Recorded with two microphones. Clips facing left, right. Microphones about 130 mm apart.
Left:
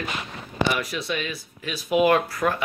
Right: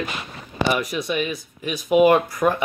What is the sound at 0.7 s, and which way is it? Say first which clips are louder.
Speech: right 4 dB; 15° right (ahead or behind).